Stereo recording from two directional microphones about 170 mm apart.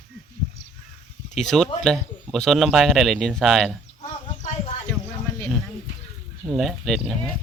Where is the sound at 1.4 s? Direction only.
Centre (ahead or behind).